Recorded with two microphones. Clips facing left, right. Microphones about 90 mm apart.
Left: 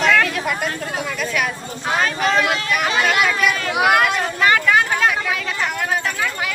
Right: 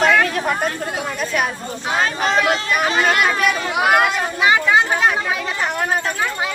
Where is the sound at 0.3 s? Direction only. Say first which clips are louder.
Right 3 dB; 35° right (ahead or behind).